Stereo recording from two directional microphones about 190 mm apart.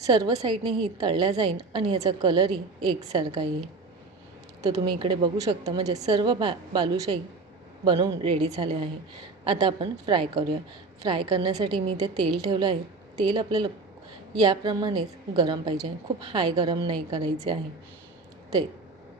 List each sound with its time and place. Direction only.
0.0 s a woman's voice: 20° right (ahead or behind)
4.9 s a woman's voice: 25° right (ahead or behind)